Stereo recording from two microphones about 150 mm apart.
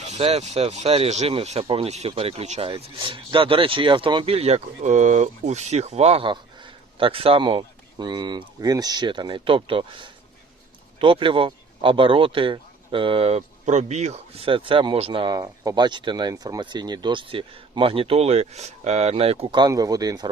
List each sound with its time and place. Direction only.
0.1 s speech: 45° right (ahead or behind); by 20.2 s 25° right (ahead or behind)